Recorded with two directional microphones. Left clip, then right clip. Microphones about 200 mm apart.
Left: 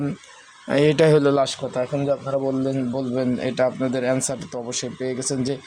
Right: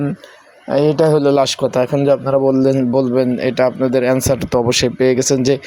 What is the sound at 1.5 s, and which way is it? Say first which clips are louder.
A man's voice: right 9 dB; 35° right (ahead or behind).